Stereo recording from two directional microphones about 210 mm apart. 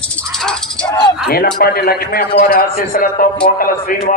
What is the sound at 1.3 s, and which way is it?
A man's voice, 45° left (ahead or behind).